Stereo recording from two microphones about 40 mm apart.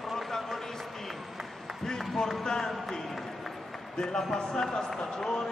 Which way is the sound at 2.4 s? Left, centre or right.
Centre.